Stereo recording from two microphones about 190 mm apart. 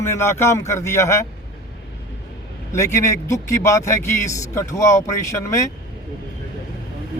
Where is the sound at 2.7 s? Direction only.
15° left (ahead or behind).